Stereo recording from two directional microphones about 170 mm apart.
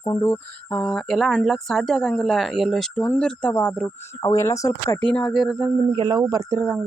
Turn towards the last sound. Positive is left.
turn(degrees=-20)  # may be behind; listen again after turning